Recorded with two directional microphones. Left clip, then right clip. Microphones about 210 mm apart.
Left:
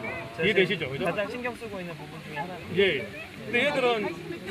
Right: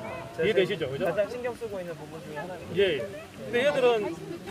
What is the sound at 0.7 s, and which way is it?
Speech, 15° right (ahead or behind).